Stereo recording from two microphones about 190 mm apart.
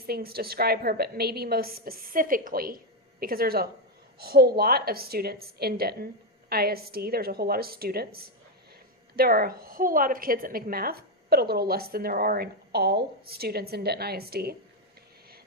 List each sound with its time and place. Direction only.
0.0 s a woman's voice: 55° right (ahead or behind)